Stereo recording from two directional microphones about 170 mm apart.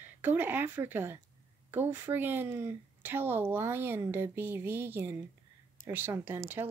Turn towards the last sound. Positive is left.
turn(degrees=-15)  # may be behind; listen again after turning